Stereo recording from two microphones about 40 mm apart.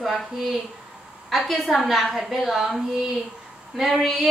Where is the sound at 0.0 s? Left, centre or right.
Centre.